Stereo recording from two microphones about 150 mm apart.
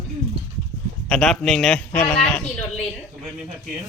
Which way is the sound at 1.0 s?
5° left (ahead or behind).